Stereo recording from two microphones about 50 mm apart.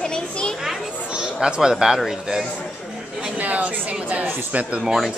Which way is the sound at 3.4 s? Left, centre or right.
Right.